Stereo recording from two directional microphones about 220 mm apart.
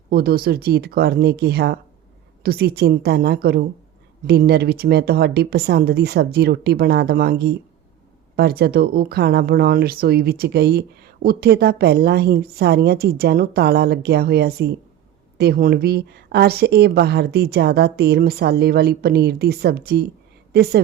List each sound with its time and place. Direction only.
0.1 s speech: 45° right (ahead or behind)